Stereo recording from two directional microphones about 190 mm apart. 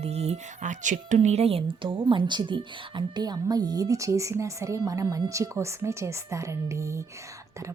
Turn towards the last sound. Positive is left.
turn(degrees=-15)  # may be behind; listen again after turning